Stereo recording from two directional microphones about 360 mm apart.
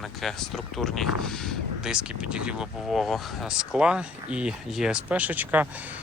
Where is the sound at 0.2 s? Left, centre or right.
Centre.